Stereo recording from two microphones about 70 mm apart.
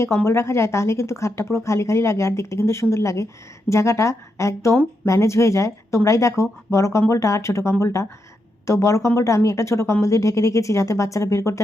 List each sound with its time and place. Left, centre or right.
0.3 s speech: left